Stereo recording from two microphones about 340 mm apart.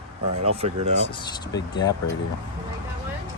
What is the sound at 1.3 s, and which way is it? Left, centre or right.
Speech, centre.